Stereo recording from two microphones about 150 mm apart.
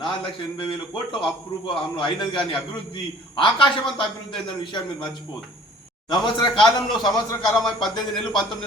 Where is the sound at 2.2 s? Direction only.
35° left (ahead or behind).